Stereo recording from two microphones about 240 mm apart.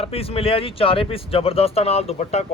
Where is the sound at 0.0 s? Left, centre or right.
Left.